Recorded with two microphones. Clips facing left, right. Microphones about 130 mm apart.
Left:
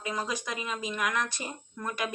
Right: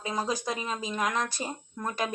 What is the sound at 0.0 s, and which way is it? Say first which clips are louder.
Speech: right 3 dB; 30° right (ahead or behind).